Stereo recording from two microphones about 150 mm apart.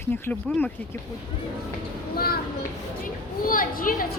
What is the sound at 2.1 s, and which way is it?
Speech, 90° left.